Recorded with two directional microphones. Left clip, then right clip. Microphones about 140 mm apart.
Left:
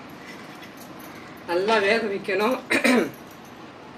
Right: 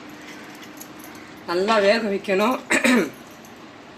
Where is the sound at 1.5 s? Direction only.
90° right.